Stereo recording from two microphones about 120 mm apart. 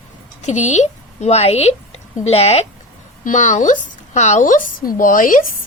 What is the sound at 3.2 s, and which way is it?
Speech, 90° left.